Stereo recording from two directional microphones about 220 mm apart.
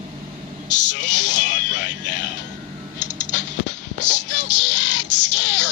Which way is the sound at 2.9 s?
35° left (ahead or behind).